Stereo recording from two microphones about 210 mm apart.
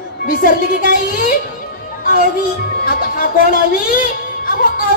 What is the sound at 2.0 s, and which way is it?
Music, 40° left (ahead or behind).